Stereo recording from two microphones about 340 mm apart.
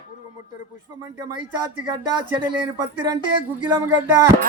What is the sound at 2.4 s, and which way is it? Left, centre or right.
Speech, centre.